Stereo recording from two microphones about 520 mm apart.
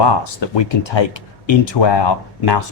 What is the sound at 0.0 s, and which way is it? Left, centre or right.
Speech, left.